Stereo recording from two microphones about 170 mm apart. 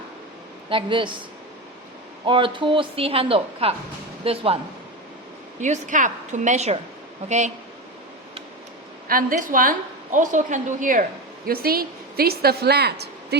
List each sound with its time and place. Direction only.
0.7 s speech: 30° right (ahead or behind)
2.2 s a woman's voice: 30° right (ahead or behind)
5.5 s a woman's voice: 45° right (ahead or behind)
9.0 s a woman's voice: 55° right (ahead or behind)
11.4 s a woman's voice: 60° right (ahead or behind)